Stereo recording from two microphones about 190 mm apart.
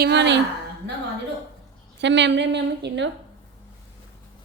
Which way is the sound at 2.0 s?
70° right (ahead or behind).